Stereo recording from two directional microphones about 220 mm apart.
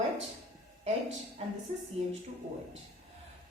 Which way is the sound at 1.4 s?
25° right (ahead or behind).